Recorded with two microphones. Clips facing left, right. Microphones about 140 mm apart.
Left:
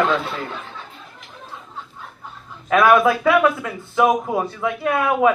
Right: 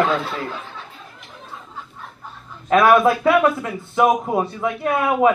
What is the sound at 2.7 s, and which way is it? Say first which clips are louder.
Speech: right 1 dB; centre (ahead or behind).